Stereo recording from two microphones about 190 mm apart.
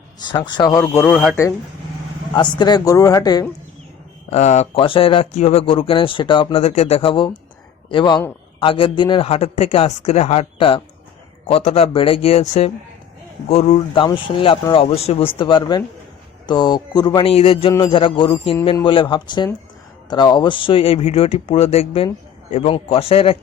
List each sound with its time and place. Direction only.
0.3 s speech: 25° left (ahead or behind)
1.1 s speech: centre (ahead or behind)
2.3 s speech: 25° left (ahead or behind)
4.3 s speech: 35° left (ahead or behind)